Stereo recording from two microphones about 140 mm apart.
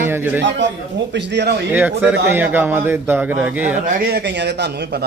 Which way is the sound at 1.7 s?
10° right (ahead or behind).